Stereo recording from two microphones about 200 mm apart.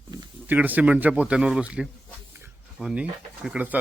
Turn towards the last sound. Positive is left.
turn(degrees=-5)  # may be behind; listen again after turning